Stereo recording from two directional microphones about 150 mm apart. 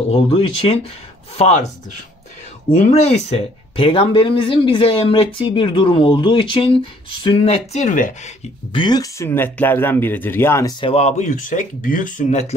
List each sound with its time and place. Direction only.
0.1 s speech: 45° left (ahead or behind)
2.7 s speech: 50° left (ahead or behind)
8.7 s speech: 30° left (ahead or behind)
10.8 s speech: 45° left (ahead or behind)